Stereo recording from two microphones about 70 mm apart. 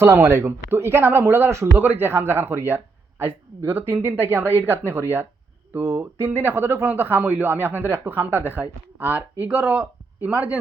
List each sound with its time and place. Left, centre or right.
0.0 s a man's voice: right
5.7 s speech: right
10.2 s speech: centre